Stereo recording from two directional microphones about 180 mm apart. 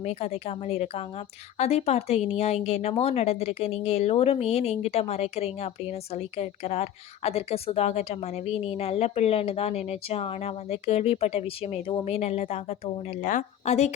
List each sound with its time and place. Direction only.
0.0 s speech: 35° left (ahead or behind)